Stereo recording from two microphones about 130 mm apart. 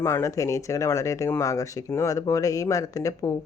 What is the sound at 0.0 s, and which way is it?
Speech, 20° left (ahead or behind).